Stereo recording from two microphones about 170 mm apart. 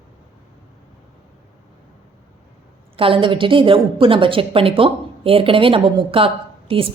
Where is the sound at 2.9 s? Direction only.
30° right (ahead or behind).